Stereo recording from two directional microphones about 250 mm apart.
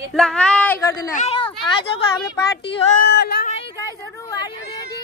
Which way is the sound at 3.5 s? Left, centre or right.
Centre.